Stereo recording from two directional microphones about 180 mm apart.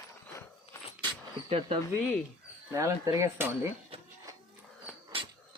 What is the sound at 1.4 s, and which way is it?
Speech, 30° right (ahead or behind).